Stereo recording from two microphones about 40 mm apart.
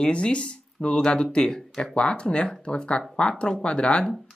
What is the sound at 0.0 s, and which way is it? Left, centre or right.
Speech, left.